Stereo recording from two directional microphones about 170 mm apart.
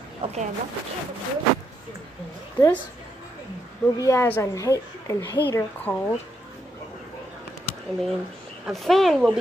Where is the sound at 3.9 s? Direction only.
15° left (ahead or behind).